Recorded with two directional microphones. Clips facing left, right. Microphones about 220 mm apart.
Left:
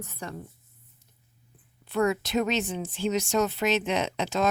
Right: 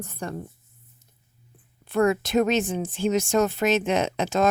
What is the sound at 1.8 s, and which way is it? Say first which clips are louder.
Speech: right 4 dB; 50° right (ahead or behind).